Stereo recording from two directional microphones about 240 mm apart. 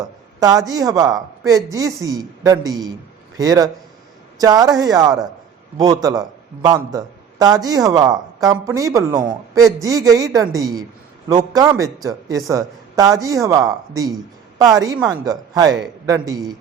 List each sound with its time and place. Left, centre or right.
0.3 s a man's voice: centre